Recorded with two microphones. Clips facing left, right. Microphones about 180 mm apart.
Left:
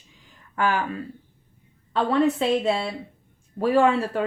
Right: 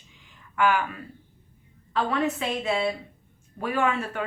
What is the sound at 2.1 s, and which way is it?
A woman's voice, 30° left (ahead or behind).